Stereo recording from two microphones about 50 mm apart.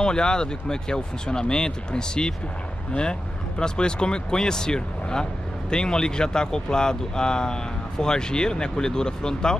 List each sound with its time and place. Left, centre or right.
0.0 s speech: centre